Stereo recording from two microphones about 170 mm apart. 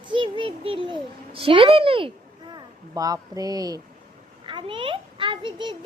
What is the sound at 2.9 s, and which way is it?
A child's voice, 20° right (ahead or behind).